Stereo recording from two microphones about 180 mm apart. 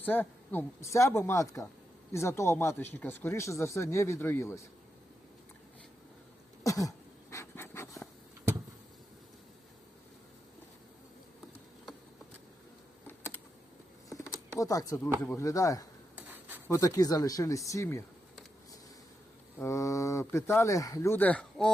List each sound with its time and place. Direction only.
0.0 s speech: 10° left (ahead or behind)
6.7 s pant: 20° left (ahead or behind)
14.3 s a sound: 20° left (ahead or behind)
15.2 s speech: 15° left (ahead or behind)
16.1 s a sound: 10° right (ahead or behind)
16.6 s speech: 15° left (ahead or behind)
19.5 s speech: 15° left (ahead or behind)